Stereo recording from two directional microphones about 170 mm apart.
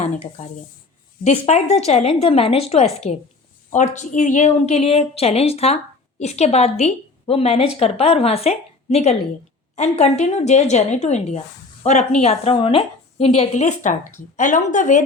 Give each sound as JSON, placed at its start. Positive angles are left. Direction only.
{"t": 0.4, "sound": "a woman's voice", "side_deg": 50}